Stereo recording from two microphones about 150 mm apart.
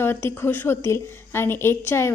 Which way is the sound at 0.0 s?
15° left (ahead or behind).